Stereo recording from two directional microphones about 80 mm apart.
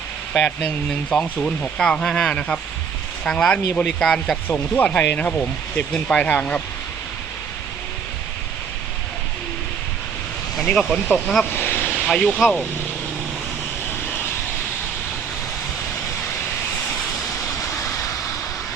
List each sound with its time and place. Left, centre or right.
0.3 s speech: centre
4.7 s speech: centre
10.6 s speech: centre
11.5 s a sound: left
12.0 s speech: centre
17.6 s vehicle: left